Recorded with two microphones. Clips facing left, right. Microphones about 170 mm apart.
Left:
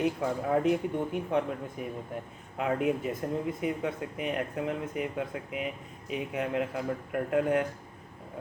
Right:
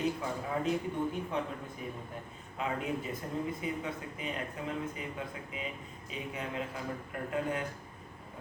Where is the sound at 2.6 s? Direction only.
60° left (ahead or behind).